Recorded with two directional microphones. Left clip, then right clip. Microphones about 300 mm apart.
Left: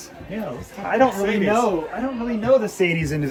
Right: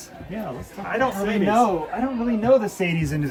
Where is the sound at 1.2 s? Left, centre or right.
Centre.